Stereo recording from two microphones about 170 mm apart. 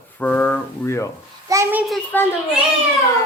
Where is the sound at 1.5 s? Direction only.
15° right (ahead or behind).